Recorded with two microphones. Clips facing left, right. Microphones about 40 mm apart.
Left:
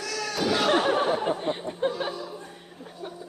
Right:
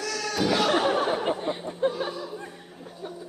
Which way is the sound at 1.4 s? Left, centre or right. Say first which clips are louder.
Left 1 dB; centre.